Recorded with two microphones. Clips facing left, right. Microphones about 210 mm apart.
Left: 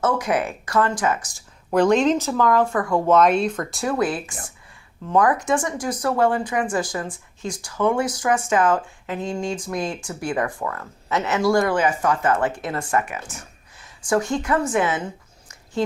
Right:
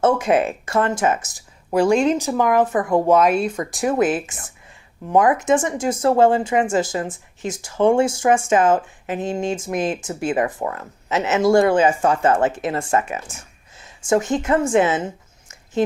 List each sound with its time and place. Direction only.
0.0 s speech: 25° right (ahead or behind)
1.7 s speech: 10° right (ahead or behind)
3.2 s speech: 5° right (ahead or behind); by 13.2 s 25° right (ahead or behind)
13.7 s a sound: 25° right (ahead or behind)